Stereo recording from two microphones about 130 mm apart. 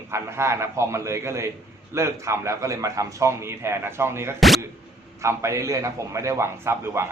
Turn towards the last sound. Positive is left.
turn(degrees=-20)  # may be behind; listen again after turning